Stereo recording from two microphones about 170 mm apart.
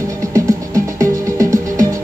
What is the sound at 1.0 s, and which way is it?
Music, 20° right (ahead or behind).